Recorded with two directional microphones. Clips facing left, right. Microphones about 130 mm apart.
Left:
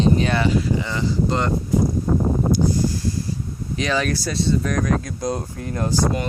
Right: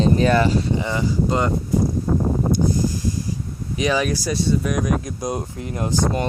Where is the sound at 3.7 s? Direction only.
15° right (ahead or behind).